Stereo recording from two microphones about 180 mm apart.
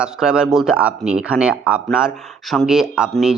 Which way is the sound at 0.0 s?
5° right (ahead or behind).